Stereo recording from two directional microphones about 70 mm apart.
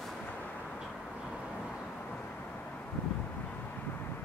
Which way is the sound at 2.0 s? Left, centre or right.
Centre.